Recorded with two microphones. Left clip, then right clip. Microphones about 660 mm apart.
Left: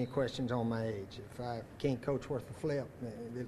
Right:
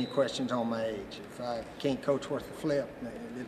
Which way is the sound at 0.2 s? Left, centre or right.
Left.